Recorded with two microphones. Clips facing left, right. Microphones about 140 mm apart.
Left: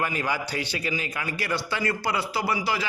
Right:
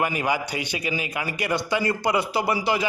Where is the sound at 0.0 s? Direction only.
15° right (ahead or behind).